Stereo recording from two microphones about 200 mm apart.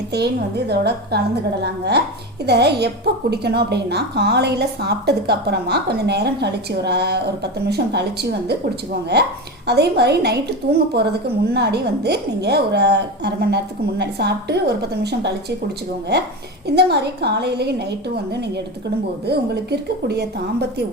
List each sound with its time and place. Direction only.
0.1 s a woman's voice: 55° right (ahead or behind)